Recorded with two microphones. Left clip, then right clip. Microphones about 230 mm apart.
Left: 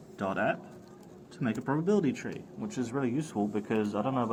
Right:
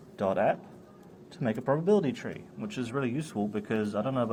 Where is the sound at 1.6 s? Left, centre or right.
Right.